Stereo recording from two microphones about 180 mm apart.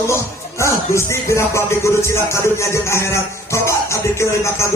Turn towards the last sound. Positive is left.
turn(degrees=15)  # may be behind; listen again after turning